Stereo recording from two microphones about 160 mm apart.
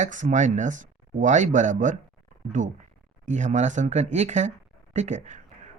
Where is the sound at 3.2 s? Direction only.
50° right (ahead or behind).